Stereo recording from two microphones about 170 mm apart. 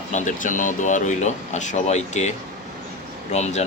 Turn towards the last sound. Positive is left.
turn(degrees=40)  # may be behind; listen again after turning